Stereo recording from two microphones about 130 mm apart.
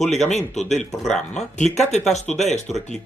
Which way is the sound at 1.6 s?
60° left (ahead or behind).